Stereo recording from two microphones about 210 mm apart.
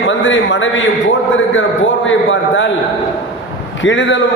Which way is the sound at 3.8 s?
65° left (ahead or behind).